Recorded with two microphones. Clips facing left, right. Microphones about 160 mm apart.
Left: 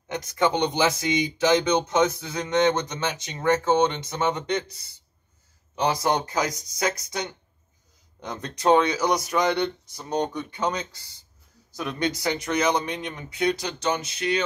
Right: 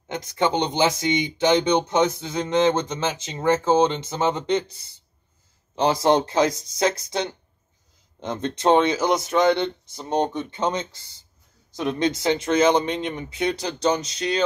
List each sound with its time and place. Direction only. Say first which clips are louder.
0.1 s speech: right 1 dB; 25° right (ahead or behind)
5.8 s speech: right 5 dB; 25° right (ahead or behind)